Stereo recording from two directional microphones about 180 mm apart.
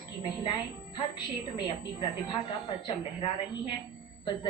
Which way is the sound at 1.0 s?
25° left (ahead or behind).